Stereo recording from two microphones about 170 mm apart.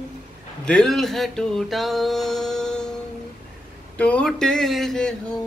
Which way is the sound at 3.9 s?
10° left (ahead or behind).